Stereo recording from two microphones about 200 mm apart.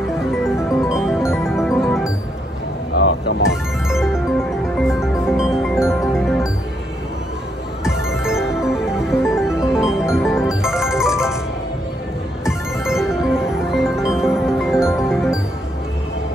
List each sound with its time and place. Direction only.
0.3 s music: centre (ahead or behind)
2.9 s music: 60° left (ahead or behind)
3.4 s music: centre (ahead or behind)
8.1 s music: centre (ahead or behind)
12.4 s music: centre (ahead or behind)